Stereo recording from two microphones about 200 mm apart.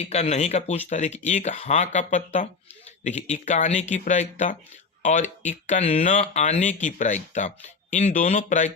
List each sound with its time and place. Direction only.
0.0 s speech: 35° left (ahead or behind)